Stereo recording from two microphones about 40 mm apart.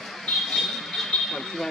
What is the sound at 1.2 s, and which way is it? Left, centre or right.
Vehicle, centre.